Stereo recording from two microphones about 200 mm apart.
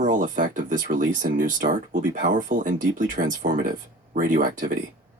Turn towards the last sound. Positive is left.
turn(degrees=-40)  # may be behind; listen again after turning